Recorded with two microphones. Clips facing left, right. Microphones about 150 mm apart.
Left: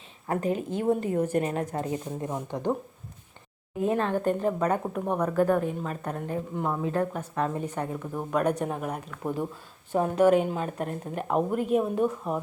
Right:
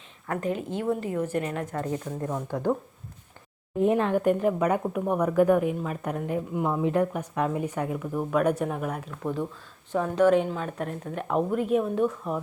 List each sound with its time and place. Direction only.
0.3 s a woman's voice: 30° left (ahead or behind)
1.7 s speech: 20° left (ahead or behind)
3.8 s speech: 15° right (ahead or behind); by 9.0 s centre (ahead or behind)
9.2 s a woman's voice: 15° left (ahead or behind)